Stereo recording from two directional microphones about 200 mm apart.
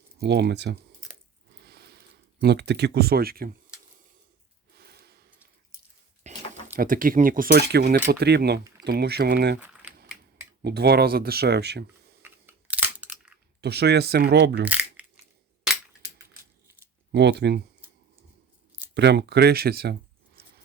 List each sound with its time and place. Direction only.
0.2 s speech: 55° right (ahead or behind)
1.5 s a sound: 55° right (ahead or behind)
4.7 s snort: 50° right (ahead or behind)
6.3 s a sound: 35° right (ahead or behind)
6.7 s speech: 45° right (ahead or behind)
9.6 s a sound: 10° right (ahead or behind)
10.6 s speech: 55° right (ahead or behind)
12.2 s scissors: 10° right (ahead or behind)
13.6 s speech: 55° right (ahead or behind)
14.6 s crumpling: 10° right (ahead or behind)
15.6 s cap gun: 5° right (ahead or behind)
17.1 s speech: 60° right (ahead or behind)
18.9 s speech: 55° right (ahead or behind)
20.4 s a sound: 55° right (ahead or behind)